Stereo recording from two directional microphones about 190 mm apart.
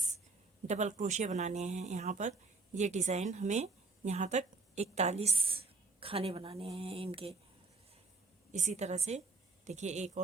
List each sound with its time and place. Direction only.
0.7 s a woman's voice: 40° right (ahead or behind)
8.5 s speech: 35° right (ahead or behind)